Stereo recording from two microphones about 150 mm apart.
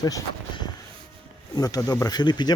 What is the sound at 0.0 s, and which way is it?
Speech, 25° left (ahead or behind).